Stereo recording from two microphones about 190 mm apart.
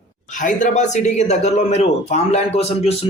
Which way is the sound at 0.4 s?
40° left (ahead or behind).